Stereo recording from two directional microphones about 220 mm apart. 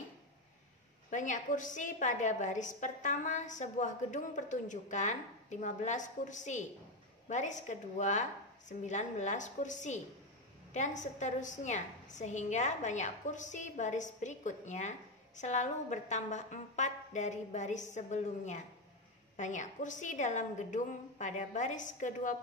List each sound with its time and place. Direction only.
1.1 s a woman's voice: 35° left (ahead or behind)